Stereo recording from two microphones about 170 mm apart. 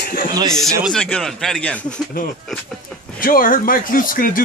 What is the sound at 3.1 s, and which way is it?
Speech, 55° left (ahead or behind).